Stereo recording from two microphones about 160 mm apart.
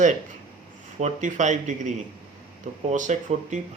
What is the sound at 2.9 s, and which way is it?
Speech, 50° right (ahead or behind).